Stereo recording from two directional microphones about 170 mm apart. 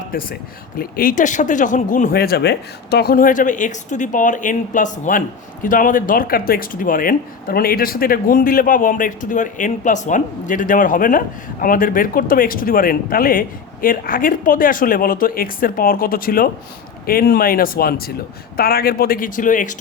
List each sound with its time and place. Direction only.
0.1 s speech: 55° left (ahead or behind)